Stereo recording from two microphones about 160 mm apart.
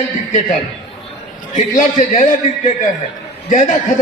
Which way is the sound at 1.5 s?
50° left (ahead or behind).